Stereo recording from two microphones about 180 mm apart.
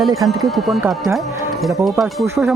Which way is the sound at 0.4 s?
Centre (ahead or behind).